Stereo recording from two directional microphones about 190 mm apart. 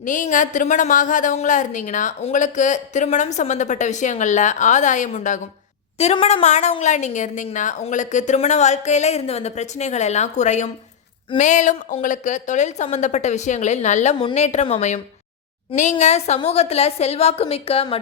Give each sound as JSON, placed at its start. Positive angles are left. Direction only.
{"t": 0.0, "sound": "a woman's voice", "side_deg": 45}